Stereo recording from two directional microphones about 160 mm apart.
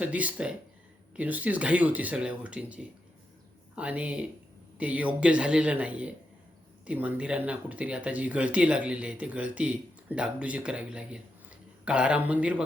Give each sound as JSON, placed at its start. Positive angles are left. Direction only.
{"t": 0.0, "sound": "speech", "side_deg": -10}